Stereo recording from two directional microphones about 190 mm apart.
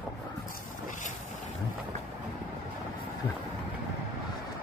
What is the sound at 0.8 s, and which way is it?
Boat, 40° left (ahead or behind).